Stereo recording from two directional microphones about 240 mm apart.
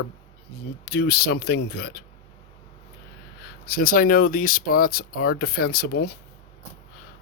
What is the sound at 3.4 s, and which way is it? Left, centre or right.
Speech, left.